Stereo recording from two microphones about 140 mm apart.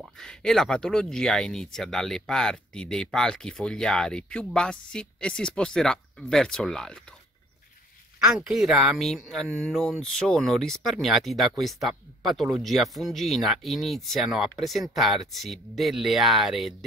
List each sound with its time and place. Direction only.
0.0 s speech: 5° left (ahead or behind)
8.2 s speech: 5° right (ahead or behind)